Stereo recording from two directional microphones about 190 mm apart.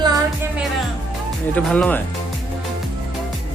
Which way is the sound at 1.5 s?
5° left (ahead or behind).